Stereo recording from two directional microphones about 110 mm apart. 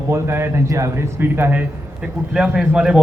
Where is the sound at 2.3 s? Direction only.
5° right (ahead or behind).